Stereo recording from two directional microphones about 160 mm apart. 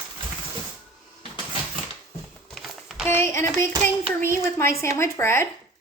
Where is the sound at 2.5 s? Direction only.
Centre (ahead or behind).